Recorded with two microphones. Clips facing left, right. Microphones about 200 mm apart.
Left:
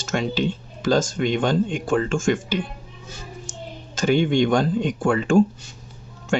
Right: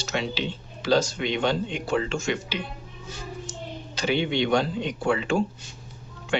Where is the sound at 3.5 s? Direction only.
45° left (ahead or behind).